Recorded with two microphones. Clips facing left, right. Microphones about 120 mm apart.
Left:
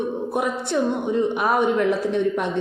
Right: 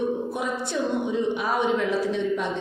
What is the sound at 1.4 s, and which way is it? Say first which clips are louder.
Speech: left 4 dB; 60° left (ahead or behind).